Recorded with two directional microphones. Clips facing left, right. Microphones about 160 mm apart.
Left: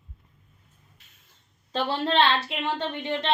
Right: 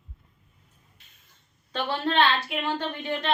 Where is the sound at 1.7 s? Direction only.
30° left (ahead or behind).